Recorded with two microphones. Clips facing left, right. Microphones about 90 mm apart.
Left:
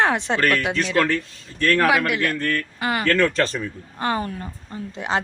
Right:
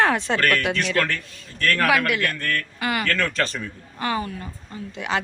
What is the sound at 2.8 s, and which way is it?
Speech, 25° left (ahead or behind).